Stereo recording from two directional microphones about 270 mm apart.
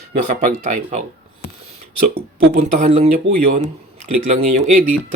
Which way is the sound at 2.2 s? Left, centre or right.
Right.